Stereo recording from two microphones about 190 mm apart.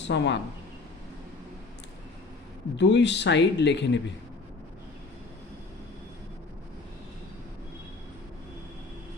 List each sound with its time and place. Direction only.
0.0 s speech: 65° left (ahead or behind)
2.7 s speech: 65° left (ahead or behind)